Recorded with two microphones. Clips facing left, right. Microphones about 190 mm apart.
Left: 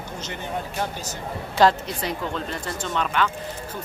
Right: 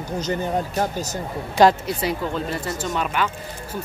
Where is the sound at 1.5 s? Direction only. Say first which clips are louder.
Right 3 dB; 10° right (ahead or behind).